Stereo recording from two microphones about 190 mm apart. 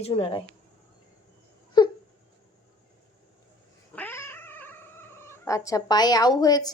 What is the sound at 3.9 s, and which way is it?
Cat, 10° left (ahead or behind).